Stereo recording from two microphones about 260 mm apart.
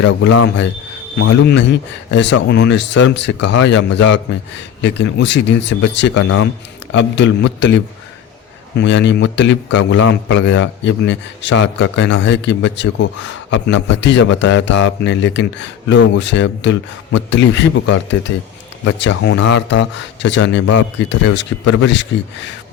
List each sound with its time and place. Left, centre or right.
0.0 s a man's voice: left
2.0 s a man's voice: left
8.8 s a man's voice: left